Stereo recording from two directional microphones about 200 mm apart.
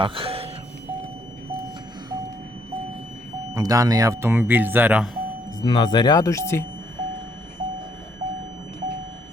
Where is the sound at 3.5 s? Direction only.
15° right (ahead or behind).